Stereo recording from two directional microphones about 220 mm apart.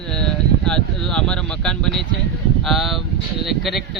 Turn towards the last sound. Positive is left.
turn(degrees=0)  # may be behind; listen again after turning